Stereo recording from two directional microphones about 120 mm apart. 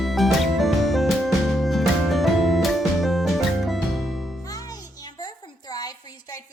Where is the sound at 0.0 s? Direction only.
Centre (ahead or behind).